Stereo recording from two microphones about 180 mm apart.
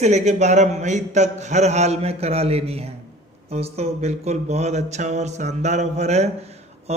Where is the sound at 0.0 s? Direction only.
40° right (ahead or behind).